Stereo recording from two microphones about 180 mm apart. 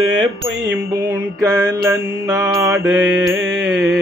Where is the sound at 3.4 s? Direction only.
80° right.